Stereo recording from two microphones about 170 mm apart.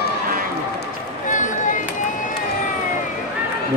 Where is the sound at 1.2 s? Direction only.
50° left (ahead or behind).